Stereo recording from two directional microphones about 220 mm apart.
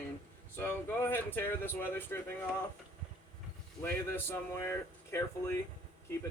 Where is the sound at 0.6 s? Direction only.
10° left (ahead or behind).